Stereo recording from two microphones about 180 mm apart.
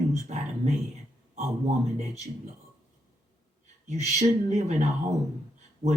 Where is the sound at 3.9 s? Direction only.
40° right (ahead or behind).